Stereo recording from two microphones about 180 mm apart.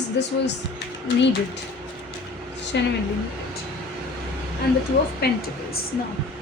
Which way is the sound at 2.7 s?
75° left (ahead or behind).